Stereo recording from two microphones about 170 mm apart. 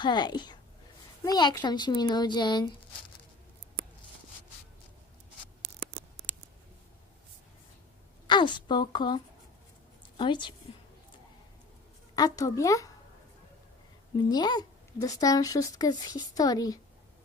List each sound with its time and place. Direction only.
0.0 s speech: 25° left (ahead or behind)
8.3 s a woman's voice: 25° left (ahead or behind)
12.1 s speech: 20° left (ahead or behind)
14.3 s speech: 25° left (ahead or behind)